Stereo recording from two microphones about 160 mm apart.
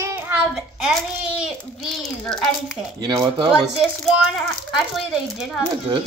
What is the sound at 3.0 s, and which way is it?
Speech, 30° right (ahead or behind).